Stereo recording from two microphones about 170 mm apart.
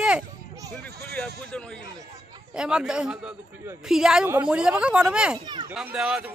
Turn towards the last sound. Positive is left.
turn(degrees=-10)  # may be behind; listen again after turning